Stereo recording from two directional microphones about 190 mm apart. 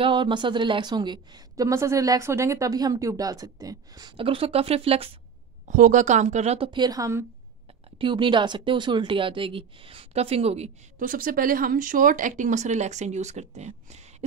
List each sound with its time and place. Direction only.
0.0 s a woman's voice: 25° right (ahead or behind)
5.7 s speech: 40° right (ahead or behind)